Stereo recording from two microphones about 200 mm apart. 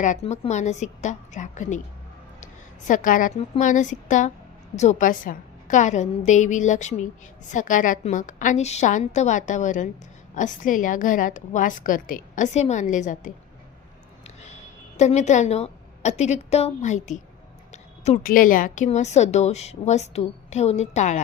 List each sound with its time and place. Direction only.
0.0 s a woman's voice: 35° left (ahead or behind)
15.0 s a woman's voice: 35° left (ahead or behind)